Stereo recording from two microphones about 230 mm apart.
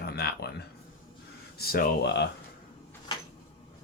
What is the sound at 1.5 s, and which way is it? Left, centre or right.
Speech, left.